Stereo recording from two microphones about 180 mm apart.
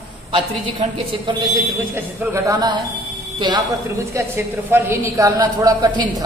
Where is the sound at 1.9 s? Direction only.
15° right (ahead or behind).